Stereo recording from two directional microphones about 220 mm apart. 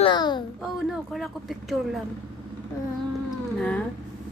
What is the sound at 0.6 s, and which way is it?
A woman's voice, centre (ahead or behind).